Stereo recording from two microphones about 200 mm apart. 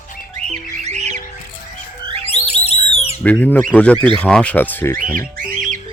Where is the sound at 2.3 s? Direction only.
30° left (ahead or behind).